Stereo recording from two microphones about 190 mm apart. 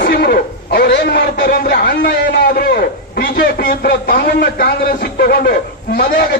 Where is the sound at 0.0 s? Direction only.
55° left (ahead or behind).